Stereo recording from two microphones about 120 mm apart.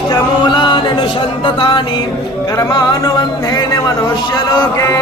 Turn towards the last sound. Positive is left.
turn(degrees=25)  # may be behind; listen again after turning